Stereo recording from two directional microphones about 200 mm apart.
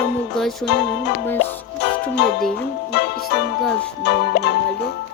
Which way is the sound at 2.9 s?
55° left (ahead or behind).